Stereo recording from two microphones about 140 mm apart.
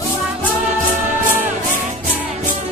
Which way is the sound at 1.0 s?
60° right (ahead or behind).